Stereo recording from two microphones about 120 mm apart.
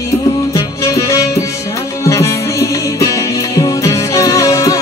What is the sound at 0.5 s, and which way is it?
Music, 30° left (ahead or behind).